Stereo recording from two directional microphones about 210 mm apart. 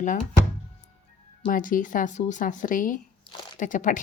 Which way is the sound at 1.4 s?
40° left (ahead or behind).